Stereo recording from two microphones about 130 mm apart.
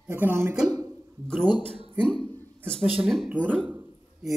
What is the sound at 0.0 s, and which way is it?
Speech, 15° right (ahead or behind).